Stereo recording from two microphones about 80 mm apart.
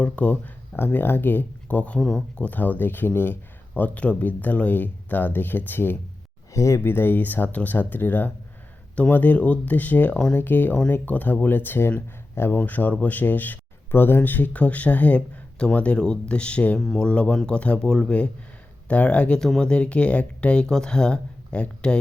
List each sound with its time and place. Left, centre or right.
0.0 s speech: centre
6.5 s speech: left; by 21.9 s centre